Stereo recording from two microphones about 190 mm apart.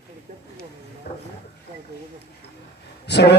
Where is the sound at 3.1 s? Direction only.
60° left (ahead or behind).